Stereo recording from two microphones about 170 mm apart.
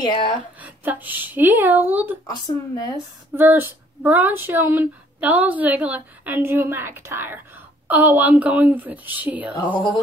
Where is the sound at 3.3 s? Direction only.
15° right (ahead or behind).